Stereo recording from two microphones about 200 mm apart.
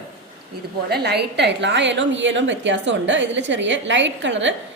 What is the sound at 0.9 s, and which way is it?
A woman's voice, 55° right (ahead or behind).